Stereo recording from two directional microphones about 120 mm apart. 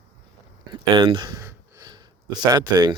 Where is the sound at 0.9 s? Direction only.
40° right (ahead or behind).